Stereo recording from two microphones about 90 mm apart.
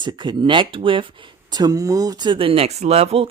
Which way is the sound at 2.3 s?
85° right.